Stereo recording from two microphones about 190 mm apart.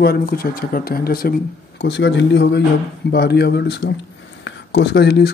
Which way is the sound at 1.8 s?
65° left (ahead or behind).